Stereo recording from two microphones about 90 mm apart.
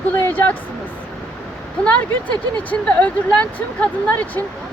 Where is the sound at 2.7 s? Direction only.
15° left (ahead or behind).